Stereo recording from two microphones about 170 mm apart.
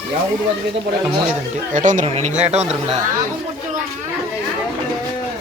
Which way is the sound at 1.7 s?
50° right (ahead or behind).